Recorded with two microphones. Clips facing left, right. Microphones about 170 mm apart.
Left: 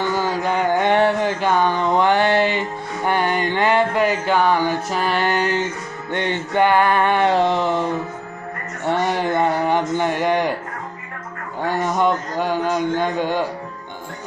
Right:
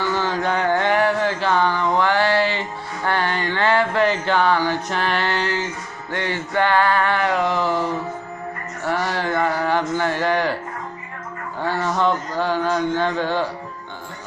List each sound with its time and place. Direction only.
0.0 s carnatic music: 10° left (ahead or behind)
0.8 s a sound: 25° left (ahead or behind)
8.8 s speech: 20° left (ahead or behind)
11.6 s a man's voice: 15° left (ahead or behind)